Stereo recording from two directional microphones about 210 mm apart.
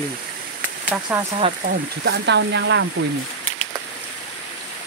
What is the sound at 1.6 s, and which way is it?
Speech, 55° right (ahead or behind).